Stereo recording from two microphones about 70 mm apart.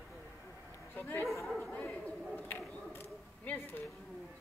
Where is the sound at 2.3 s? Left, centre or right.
Left.